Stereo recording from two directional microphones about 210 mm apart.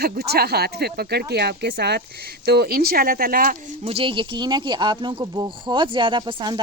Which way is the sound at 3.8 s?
25° right (ahead or behind).